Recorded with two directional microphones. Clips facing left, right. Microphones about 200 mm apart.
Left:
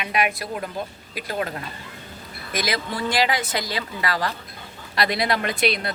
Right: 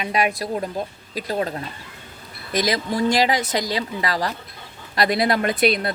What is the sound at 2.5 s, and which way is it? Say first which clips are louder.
A woman's voice: right 5 dB; 40° right (ahead or behind).